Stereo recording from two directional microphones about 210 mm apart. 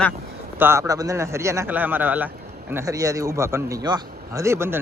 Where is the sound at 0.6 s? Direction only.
10° right (ahead or behind).